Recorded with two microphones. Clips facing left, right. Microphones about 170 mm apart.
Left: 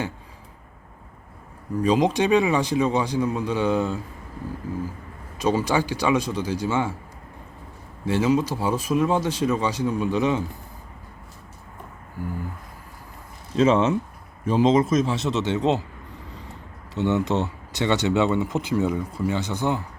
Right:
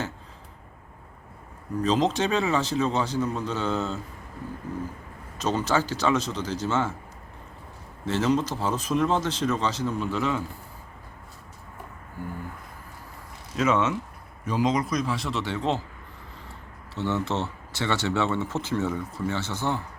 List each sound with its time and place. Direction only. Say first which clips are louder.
1.8 s speech: left 3 dB; 10° left (ahead or behind)
5.4 s speech: left 3 dB; 10° left (ahead or behind)
8.0 s speech: left 3 dB; 10° left (ahead or behind)
13.6 s a man's voice: left 5 dB; 30° left (ahead or behind)
16.9 s speech: left 5 dB; 15° left (ahead or behind)